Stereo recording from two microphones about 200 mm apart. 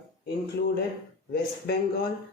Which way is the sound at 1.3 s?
55° left (ahead or behind).